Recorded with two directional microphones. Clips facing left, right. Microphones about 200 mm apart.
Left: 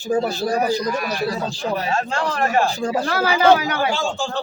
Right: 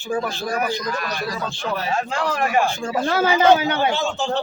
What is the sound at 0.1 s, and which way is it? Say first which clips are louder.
Speech: left 4 dB; 35° left (ahead or behind).